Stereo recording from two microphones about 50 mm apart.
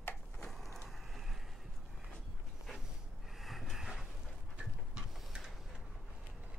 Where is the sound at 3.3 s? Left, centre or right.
Centre.